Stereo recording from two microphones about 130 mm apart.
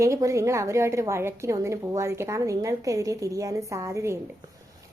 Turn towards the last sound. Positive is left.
turn(degrees=-20)  # may be behind; listen again after turning